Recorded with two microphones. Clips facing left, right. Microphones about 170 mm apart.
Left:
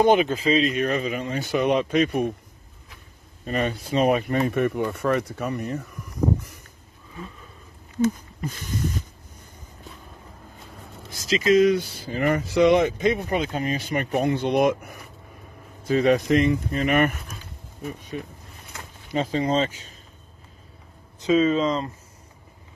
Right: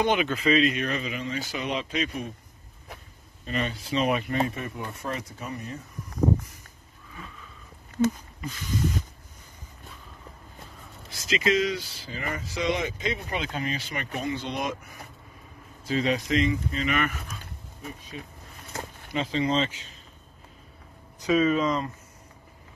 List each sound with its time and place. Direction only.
0.0 s speech: 40° left (ahead or behind); by 2.3 s 55° left (ahead or behind)
3.4 s speech: 45° left (ahead or behind); by 5.9 s 65° left (ahead or behind)
8.4 s speech: 50° left (ahead or behind)
11.1 s speech: 40° left (ahead or behind)
19.1 s speech: 45° left (ahead or behind)
21.2 s speech: 25° left (ahead or behind)